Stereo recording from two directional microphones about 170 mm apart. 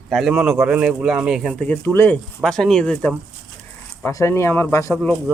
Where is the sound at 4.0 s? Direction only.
15° left (ahead or behind).